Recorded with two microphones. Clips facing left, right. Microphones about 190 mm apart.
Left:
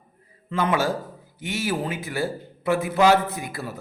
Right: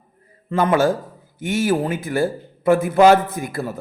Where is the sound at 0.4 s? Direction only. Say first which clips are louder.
Right 6 dB; 45° right (ahead or behind).